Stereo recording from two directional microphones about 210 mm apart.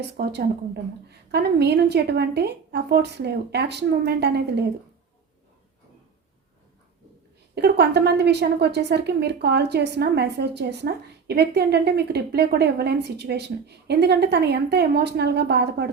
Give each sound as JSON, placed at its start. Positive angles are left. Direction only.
{"t": 0.2, "sound": "a woman's voice", "side_deg": -50}
{"t": 7.5, "sound": "a woman's voice", "side_deg": -50}